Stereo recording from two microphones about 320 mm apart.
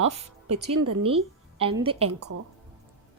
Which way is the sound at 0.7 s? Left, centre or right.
Right.